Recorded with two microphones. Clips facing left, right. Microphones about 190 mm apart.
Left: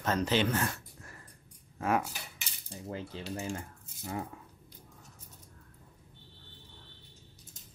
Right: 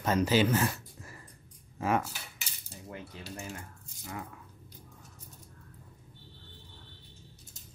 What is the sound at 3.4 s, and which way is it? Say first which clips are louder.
Speech: left 5 dB; 25° left (ahead or behind).